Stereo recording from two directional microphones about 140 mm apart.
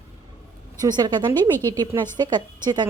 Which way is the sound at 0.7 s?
30° right (ahead or behind).